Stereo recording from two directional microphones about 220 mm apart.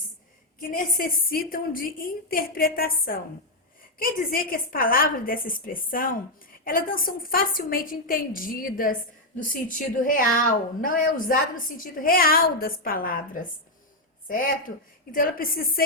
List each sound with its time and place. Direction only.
0.7 s a woman's voice: 40° left (ahead or behind)